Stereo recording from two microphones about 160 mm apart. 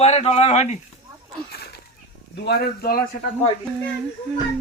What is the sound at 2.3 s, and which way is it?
Speech, 85° left.